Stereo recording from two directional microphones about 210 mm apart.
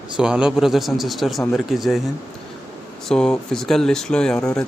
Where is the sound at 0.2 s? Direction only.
5° right (ahead or behind).